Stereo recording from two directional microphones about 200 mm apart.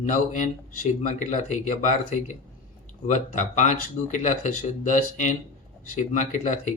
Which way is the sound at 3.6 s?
40° left (ahead or behind).